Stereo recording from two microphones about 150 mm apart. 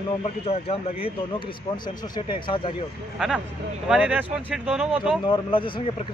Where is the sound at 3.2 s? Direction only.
5° right (ahead or behind).